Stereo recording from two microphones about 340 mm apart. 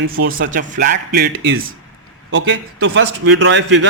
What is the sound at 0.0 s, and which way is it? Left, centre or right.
Speech, right.